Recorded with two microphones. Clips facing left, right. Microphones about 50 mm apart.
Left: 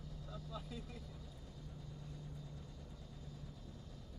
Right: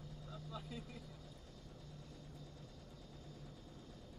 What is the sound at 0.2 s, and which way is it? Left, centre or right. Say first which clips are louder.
Vehicle: left 1 dB; centre.